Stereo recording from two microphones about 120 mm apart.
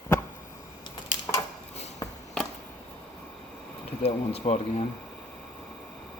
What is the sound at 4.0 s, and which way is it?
Speech, 60° left (ahead or behind).